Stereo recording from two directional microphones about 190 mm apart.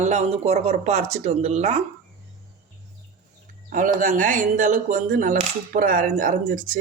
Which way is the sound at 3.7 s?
45° right (ahead or behind).